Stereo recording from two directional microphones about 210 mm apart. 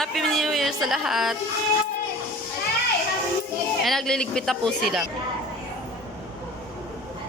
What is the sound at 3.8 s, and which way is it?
A woman's voice, centre (ahead or behind).